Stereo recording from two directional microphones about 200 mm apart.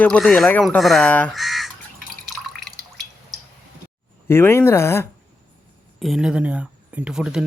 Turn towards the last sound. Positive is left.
turn(degrees=-5)  # may be behind; listen again after turning